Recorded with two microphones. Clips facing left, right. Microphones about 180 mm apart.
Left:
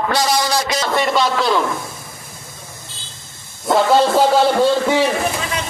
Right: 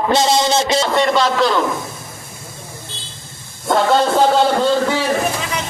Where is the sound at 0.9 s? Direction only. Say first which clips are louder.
Right 1 dB; centre (ahead or behind).